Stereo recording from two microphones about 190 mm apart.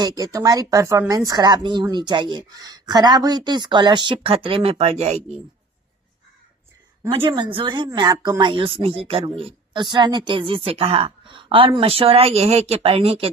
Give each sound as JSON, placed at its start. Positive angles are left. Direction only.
{"t": 0.0, "sound": "speech", "side_deg": -20}
{"t": 7.1, "sound": "speech", "side_deg": -25}